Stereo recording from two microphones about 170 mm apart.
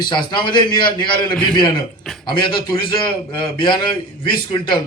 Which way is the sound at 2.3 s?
25° left (ahead or behind).